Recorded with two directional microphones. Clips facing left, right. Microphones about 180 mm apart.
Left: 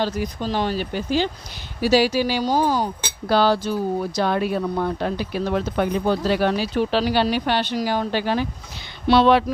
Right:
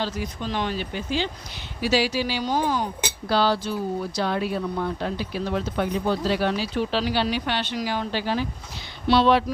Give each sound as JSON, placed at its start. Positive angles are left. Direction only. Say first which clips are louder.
{"t": 0.0, "sound": "speech", "louder": "left 5 dB", "side_deg": 40}
{"t": 3.2, "sound": "speech", "louder": "left 4 dB", "side_deg": 50}